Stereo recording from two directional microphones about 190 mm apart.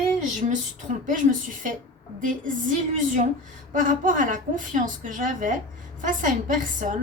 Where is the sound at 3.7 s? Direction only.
45° right (ahead or behind).